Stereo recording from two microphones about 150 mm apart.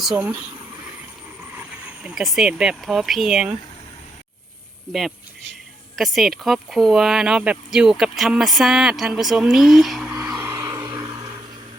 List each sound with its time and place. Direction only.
1.5 s speech: 5° right (ahead or behind)
4.9 s speech: centre (ahead or behind)
10.2 s music: 10° right (ahead or behind)